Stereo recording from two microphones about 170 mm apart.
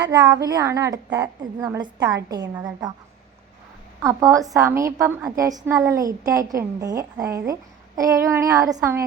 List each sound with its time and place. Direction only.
0.4 s a woman's voice: 20° right (ahead or behind)
4.0 s a woman's voice: 20° right (ahead or behind)